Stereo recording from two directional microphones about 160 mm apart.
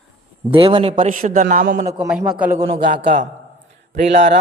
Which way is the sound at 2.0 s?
5° right (ahead or behind).